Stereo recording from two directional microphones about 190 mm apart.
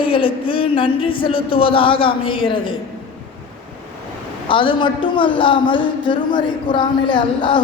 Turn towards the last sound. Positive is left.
turn(degrees=25)  # may be behind; listen again after turning